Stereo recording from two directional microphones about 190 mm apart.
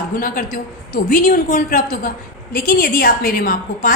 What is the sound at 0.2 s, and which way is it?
A woman's voice, 45° left (ahead or behind).